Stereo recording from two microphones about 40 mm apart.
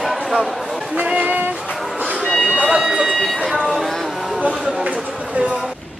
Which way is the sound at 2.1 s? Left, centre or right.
Centre.